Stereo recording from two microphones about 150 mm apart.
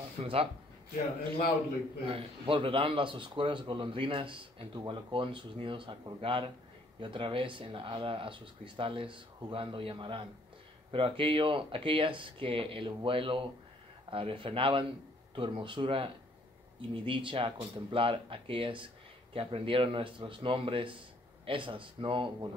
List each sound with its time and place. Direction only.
0.2 s speech: 40° right (ahead or behind)
2.0 s speech: 35° right (ahead or behind)